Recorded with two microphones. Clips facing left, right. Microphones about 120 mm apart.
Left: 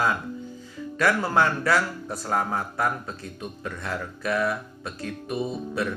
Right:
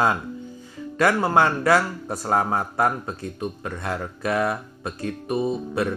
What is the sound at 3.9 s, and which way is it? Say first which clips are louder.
A man's voice: right 2 dB; 45° right (ahead or behind).